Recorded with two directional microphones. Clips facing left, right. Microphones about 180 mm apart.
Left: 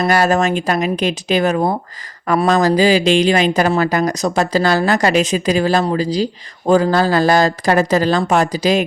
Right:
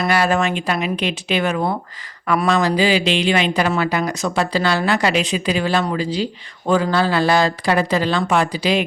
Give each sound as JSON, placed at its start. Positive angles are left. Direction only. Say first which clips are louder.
{"t": 0.1, "sound": "speech", "louder": "left 2 dB", "side_deg": 40}